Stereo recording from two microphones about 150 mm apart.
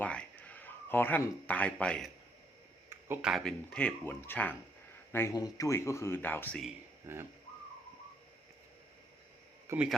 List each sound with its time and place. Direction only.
0.0 s a man's voice: 10° left (ahead or behind)
2.9 s a sound: 15° right (ahead or behind)
3.2 s speech: centre (ahead or behind)
7.1 s bird: 15° right (ahead or behind)
9.6 s speech: 10° right (ahead or behind)